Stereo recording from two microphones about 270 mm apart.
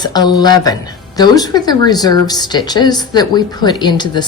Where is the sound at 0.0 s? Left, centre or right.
Centre.